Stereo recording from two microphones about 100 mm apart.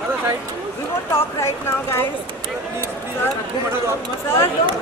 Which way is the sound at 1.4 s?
25° left (ahead or behind).